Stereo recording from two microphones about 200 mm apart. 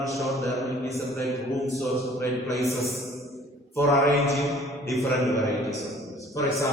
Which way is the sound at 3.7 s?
15° left (ahead or behind).